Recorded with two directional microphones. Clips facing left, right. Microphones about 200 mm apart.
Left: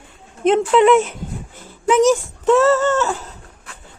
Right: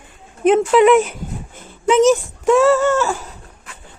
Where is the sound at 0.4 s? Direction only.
10° right (ahead or behind).